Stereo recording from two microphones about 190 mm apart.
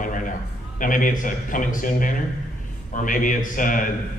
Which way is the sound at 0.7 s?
45° left (ahead or behind).